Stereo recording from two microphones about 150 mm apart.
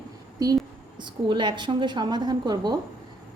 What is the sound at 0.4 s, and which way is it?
A woman's voice, 25° right (ahead or behind).